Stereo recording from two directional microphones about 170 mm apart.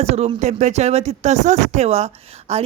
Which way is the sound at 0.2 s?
40° right (ahead or behind).